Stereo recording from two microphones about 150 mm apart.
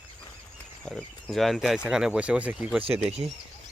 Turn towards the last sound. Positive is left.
turn(degrees=-45)  # may be behind; listen again after turning